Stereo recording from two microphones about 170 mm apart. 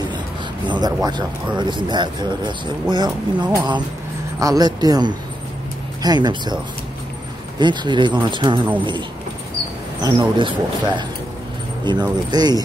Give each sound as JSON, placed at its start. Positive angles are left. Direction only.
{"t": 0.7, "sound": "speech", "side_deg": -25}
{"t": 10.0, "sound": "speech", "side_deg": -25}